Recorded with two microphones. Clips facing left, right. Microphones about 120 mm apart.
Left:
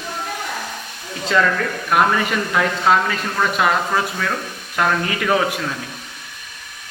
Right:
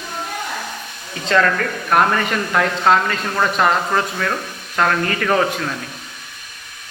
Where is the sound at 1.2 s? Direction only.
5° left (ahead or behind).